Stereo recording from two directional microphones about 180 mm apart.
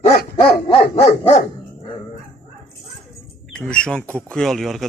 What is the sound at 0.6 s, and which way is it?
Dog, 30° left (ahead or behind).